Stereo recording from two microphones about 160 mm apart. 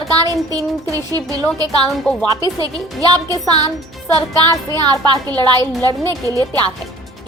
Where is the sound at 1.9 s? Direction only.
5° left (ahead or behind).